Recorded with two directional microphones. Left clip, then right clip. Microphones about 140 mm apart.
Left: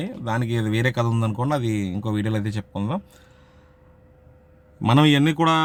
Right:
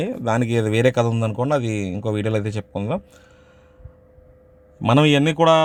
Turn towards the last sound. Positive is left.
turn(degrees=-15)  # may be behind; listen again after turning